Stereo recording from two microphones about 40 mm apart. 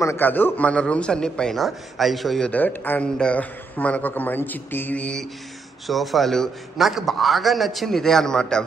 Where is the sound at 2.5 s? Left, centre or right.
Left.